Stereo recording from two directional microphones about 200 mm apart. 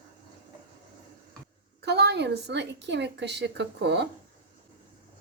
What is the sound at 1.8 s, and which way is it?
A woman's voice, 55° right (ahead or behind).